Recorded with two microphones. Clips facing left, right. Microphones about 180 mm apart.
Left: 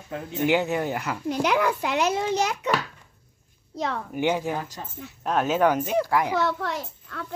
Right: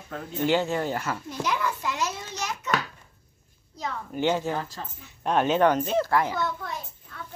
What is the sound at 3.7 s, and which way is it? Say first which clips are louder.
Speech: left 5 dB; 65° left (ahead or behind).